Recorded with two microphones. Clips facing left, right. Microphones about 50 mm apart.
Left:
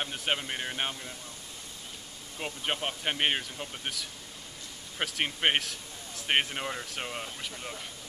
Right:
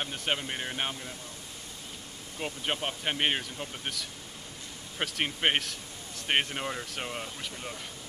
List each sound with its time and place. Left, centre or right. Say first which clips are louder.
0.0 s speech: even; centre
2.3 s speech: even; centre